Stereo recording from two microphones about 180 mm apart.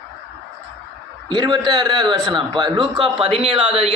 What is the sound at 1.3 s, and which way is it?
A man's voice, 25° right (ahead or behind).